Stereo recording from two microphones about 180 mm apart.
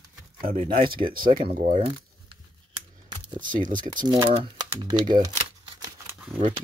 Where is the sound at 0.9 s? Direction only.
50° right (ahead or behind).